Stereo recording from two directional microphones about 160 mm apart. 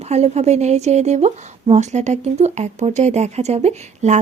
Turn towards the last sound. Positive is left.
turn(degrees=-45)  # may be behind; listen again after turning